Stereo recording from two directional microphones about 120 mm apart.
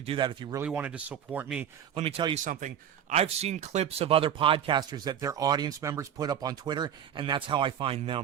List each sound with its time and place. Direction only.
0.2 s speech: 40° right (ahead or behind)
0.6 s speech: 10° right (ahead or behind)
2.0 s speech: 45° right (ahead or behind)
2.4 s speech: 90° right; by 8.2 s 50° right (ahead or behind)